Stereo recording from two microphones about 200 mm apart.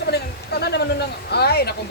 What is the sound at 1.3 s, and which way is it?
Speech, 55° left (ahead or behind).